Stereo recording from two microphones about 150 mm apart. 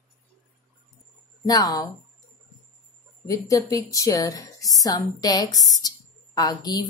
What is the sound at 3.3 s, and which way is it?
A woman's voice, 20° left (ahead or behind).